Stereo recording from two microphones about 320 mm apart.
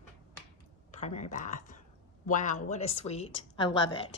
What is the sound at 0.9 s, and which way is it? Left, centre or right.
A man's voice, left.